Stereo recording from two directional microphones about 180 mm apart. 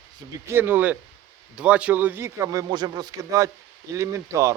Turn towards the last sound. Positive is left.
turn(degrees=-15)  # may be behind; listen again after turning